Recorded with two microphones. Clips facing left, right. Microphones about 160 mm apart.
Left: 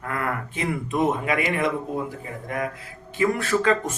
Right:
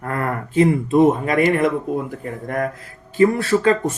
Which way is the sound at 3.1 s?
35° right (ahead or behind).